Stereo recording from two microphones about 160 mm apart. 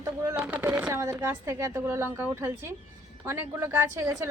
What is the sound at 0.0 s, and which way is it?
Speech, 20° right (ahead or behind).